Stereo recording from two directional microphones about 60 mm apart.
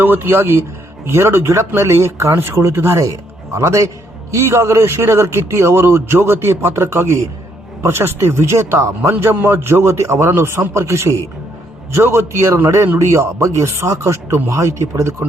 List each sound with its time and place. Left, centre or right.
0.0 s a man's voice: right
14.5 s a man's voice: right